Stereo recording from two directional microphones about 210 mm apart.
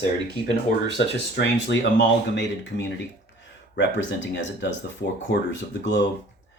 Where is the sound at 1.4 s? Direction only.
60° left (ahead or behind).